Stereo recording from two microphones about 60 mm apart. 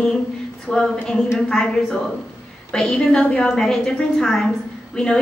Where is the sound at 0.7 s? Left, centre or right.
Centre.